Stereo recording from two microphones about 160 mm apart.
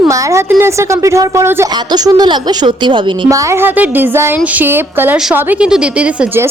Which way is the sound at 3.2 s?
20° right (ahead or behind).